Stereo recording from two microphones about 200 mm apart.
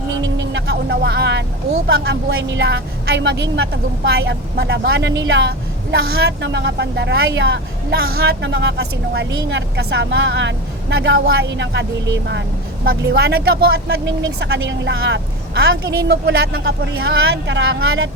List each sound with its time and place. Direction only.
0.3 s vehicle: 60° right (ahead or behind)
2.0 s speech: 60° right (ahead or behind)
17.0 s speech: 70° right (ahead or behind)